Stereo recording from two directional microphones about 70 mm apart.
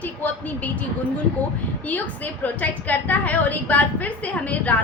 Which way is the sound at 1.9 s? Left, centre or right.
Left.